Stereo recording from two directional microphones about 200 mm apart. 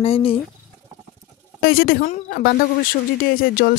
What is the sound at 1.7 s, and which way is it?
A woman's voice, 50° left (ahead or behind).